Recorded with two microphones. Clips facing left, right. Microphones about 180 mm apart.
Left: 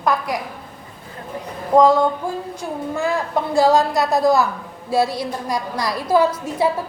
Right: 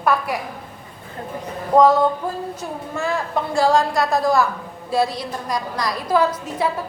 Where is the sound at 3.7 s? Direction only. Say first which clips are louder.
Left 1 dB; 20° left (ahead or behind).